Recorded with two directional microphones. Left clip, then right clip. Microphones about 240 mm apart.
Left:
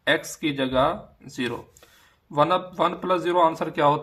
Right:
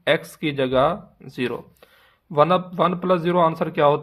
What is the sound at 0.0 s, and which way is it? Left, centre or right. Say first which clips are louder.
Speech: right 2 dB; right.